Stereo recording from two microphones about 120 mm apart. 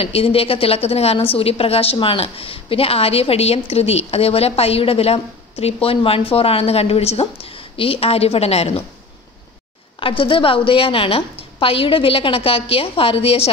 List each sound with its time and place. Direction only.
0.0 s a woman's voice: 55° left (ahead or behind)
9.9 s a woman's voice: 45° left (ahead or behind)